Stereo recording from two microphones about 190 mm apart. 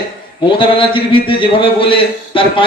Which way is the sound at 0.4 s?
25° left (ahead or behind).